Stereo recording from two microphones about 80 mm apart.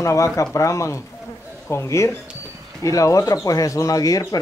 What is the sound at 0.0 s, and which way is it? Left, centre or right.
Speech, left.